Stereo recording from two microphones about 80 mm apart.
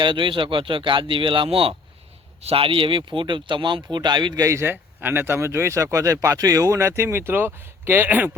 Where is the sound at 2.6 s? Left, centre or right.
Right.